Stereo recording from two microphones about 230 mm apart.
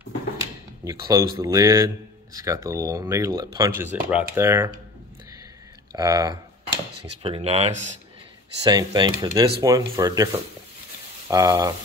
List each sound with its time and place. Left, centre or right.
0.8 s speech: centre
5.9 s speech: centre
7.2 s speech: right